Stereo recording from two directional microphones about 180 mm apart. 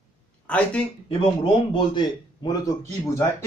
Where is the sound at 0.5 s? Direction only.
5° left (ahead or behind).